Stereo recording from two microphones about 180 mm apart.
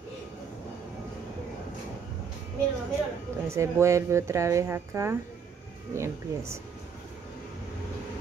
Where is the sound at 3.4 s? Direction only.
15° right (ahead or behind).